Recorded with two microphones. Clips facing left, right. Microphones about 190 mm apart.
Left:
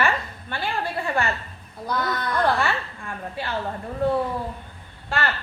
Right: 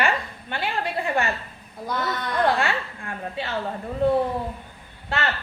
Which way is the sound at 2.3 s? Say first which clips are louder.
Right 1 dB; 20° right (ahead or behind).